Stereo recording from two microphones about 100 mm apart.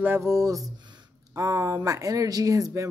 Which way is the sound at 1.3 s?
35° right (ahead or behind).